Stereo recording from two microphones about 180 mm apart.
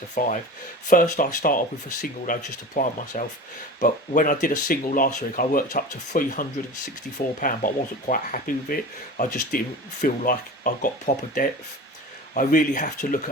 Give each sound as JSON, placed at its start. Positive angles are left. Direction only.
{"t": 0.1, "sound": "speech", "side_deg": 45}